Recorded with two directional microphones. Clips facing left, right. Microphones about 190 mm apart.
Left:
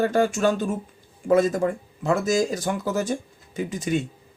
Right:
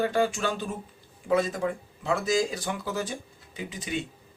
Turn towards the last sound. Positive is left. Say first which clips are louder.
# left 8 dB
turn(degrees=45)  # may be behind; listen again after turning